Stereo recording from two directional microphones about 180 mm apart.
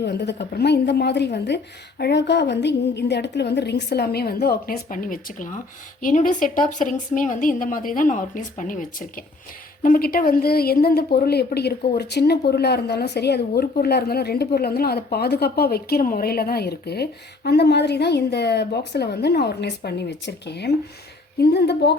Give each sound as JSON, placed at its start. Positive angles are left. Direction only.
{"t": 0.0, "sound": "a woman's voice", "side_deg": 70}